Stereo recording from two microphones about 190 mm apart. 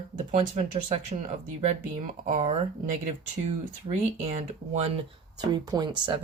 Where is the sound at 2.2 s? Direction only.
40° right (ahead or behind).